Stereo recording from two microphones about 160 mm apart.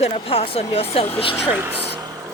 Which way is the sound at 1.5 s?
10° right (ahead or behind).